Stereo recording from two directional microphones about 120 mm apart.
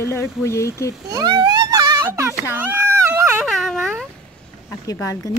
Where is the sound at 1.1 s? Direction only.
35° right (ahead or behind).